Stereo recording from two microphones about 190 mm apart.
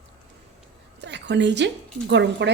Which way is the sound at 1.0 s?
65° right (ahead or behind).